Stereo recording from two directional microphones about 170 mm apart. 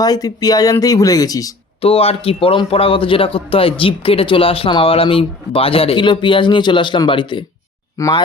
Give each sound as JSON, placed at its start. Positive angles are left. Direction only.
{"t": 0.0, "sound": "speech", "side_deg": 20}
{"t": 1.8, "sound": "a man's voice", "side_deg": 35}